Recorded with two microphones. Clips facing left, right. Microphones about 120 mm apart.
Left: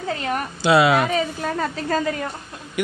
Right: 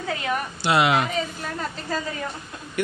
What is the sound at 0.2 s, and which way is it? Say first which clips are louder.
Speech: even; 45° left (ahead or behind).